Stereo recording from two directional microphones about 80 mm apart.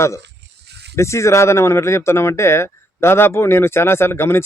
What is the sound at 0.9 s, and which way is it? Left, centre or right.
Speech, left.